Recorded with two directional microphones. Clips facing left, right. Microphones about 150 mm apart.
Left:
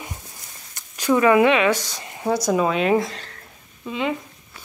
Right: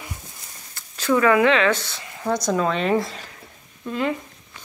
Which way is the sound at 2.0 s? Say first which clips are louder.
Left 2 dB; 20° left (ahead or behind).